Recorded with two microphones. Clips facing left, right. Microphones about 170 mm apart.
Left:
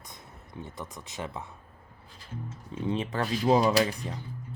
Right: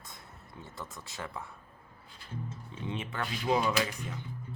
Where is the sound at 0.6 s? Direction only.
20° left (ahead or behind).